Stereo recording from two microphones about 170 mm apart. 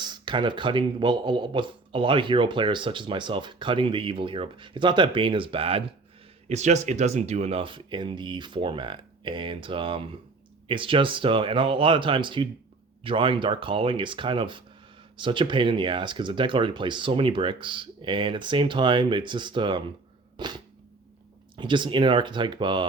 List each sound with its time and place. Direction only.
0.0 s speech: 25° right (ahead or behind)
20.3 s a sound: 25° right (ahead or behind)
21.5 s speech: 30° right (ahead or behind)